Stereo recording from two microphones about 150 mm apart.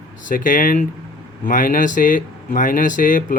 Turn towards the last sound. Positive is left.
turn(degrees=60)  # may be behind; listen again after turning